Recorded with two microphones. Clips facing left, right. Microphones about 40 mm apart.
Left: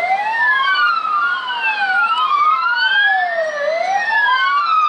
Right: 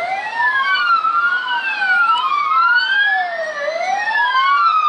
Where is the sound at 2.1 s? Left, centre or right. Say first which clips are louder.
Left 1 dB; centre.